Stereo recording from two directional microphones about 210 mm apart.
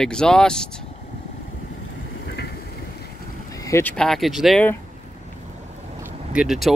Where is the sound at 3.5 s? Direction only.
15° left (ahead or behind).